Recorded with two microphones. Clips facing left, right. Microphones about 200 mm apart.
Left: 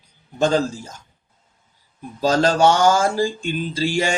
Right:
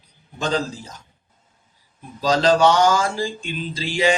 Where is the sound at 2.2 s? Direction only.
50° left (ahead or behind).